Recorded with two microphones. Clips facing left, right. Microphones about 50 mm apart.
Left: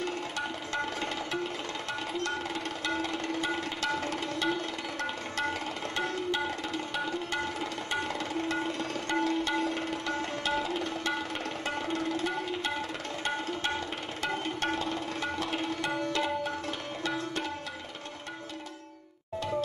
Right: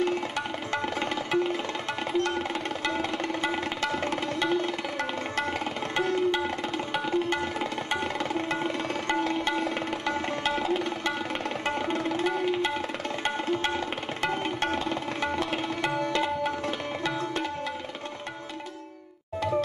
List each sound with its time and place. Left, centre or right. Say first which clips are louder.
0.7 s music: right 5 dB; right
3.5 s music: right 3 dB; right
6.9 s tabla: right 6 dB; right
8.2 s music: right 3 dB; right
14.2 s tabla: right 3 dB; right